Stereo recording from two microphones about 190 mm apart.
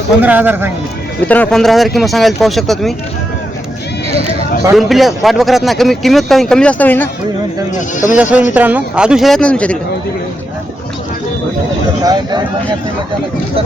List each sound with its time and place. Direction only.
0.2 s speech: 10° right (ahead or behind)
1.3 s speech: 5° left (ahead or behind)
4.7 s speech: centre (ahead or behind)
8.1 s speech: 5° right (ahead or behind)